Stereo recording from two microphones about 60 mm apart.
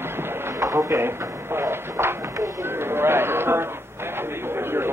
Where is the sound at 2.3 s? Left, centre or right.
Right.